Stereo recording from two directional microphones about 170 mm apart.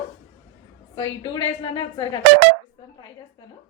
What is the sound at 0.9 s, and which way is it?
A woman's voice, 25° left (ahead or behind).